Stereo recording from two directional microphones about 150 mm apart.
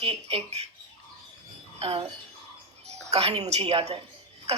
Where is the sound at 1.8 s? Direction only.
40° right (ahead or behind).